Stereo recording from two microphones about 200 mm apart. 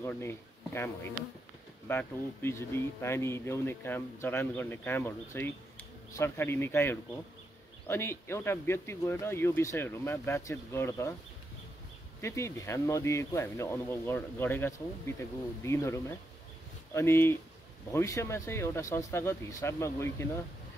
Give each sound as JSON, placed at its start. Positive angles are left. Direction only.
{"t": 0.0, "sound": "speech", "side_deg": 10}
{"t": 12.2, "sound": "speech", "side_deg": 15}